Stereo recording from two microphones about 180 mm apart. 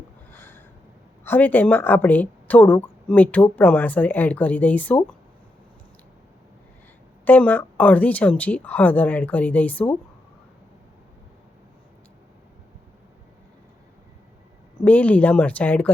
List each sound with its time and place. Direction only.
0.3 s a sound: 10° left (ahead or behind)
1.2 s a woman's voice: 10° left (ahead or behind)
7.3 s a woman's voice: 10° left (ahead or behind)
14.8 s a woman's voice: 10° left (ahead or behind)